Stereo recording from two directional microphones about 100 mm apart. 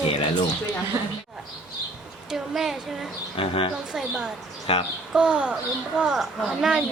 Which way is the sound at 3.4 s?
70° left (ahead or behind).